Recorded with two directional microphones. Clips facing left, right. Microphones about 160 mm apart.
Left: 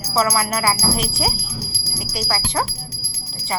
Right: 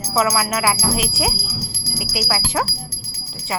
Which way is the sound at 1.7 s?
60° right (ahead or behind).